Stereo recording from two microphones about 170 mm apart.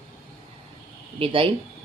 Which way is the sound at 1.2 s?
30° right (ahead or behind).